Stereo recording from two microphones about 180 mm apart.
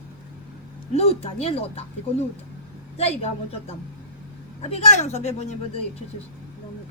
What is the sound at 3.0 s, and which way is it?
Speech, 35° left (ahead or behind).